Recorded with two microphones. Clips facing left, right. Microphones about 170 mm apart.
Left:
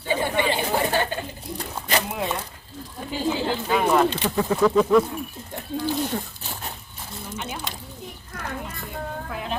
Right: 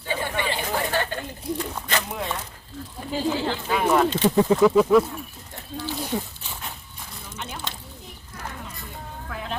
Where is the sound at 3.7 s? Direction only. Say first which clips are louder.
Left 1 dB; centre (ahead or behind).